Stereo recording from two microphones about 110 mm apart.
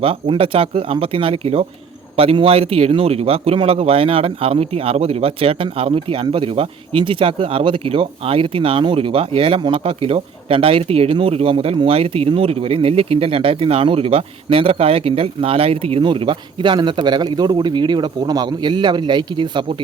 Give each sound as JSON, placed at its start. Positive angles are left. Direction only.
{"t": 0.0, "sound": "a man's voice", "side_deg": -55}